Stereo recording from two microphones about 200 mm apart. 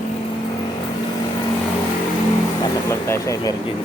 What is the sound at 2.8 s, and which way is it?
Speech, 15° left (ahead or behind).